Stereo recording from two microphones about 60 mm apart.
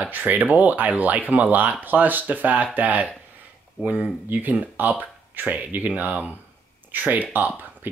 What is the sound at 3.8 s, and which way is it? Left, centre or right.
Speech, centre.